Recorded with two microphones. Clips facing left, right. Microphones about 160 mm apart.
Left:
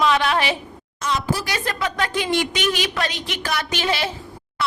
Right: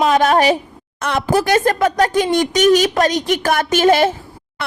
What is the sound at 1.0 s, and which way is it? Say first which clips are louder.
A woman's voice: right 7 dB; 60° right (ahead or behind).